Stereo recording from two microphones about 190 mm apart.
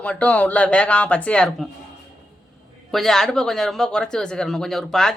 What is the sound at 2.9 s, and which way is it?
Speech, centre (ahead or behind).